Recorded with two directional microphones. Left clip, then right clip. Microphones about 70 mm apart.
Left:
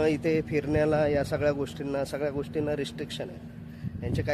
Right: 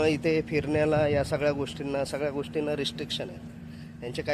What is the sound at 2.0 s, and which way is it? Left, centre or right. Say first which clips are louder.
Speech: even; left.